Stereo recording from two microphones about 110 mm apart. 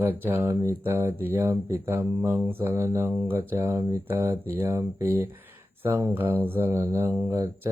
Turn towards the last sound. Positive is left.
turn(degrees=-30)  # may be behind; listen again after turning